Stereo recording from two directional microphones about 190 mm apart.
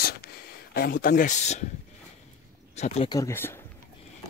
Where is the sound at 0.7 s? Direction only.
50° left (ahead or behind); by 1.6 s 35° left (ahead or behind).